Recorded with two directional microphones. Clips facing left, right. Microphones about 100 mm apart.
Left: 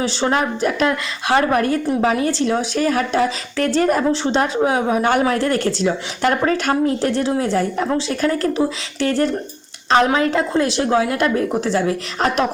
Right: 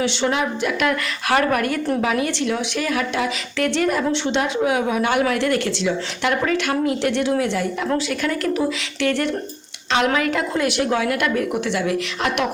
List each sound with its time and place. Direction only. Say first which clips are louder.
0.0 s a woman's voice: left 2 dB; 35° left (ahead or behind)
0.9 s a woman's voice: left 1 dB; 25° left (ahead or behind)